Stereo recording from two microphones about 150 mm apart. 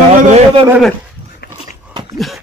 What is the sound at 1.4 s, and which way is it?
Biting, 90° left.